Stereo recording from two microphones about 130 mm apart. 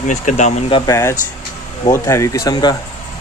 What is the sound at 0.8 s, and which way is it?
Speech, 25° left (ahead or behind).